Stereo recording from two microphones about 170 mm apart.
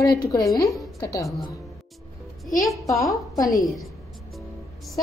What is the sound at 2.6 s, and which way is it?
A woman's voice, 20° left (ahead or behind).